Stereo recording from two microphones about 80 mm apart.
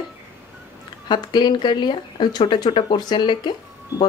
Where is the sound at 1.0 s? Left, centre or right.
Left.